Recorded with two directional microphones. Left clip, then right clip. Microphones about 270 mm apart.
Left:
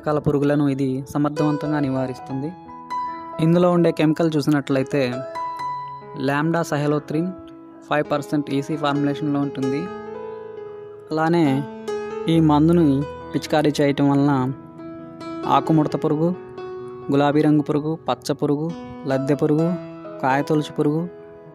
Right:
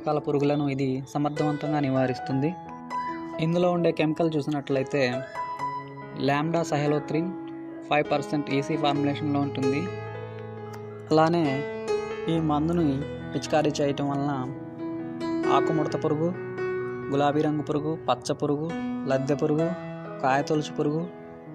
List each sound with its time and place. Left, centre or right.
0.0 s speech: left; by 2.5 s centre
3.3 s speech: left
11.2 s speech: centre